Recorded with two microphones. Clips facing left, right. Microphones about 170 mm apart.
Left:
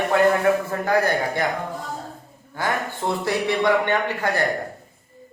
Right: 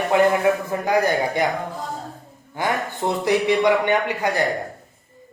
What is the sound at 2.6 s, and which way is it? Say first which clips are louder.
Speech: right 2 dB; 15° right (ahead or behind).